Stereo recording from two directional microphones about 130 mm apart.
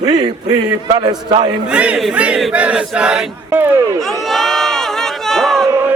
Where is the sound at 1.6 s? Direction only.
10° right (ahead or behind).